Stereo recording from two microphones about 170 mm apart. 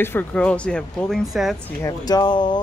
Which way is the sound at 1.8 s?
25° left (ahead or behind).